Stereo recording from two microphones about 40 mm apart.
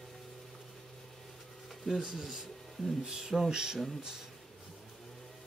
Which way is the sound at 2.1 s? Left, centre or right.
Centre.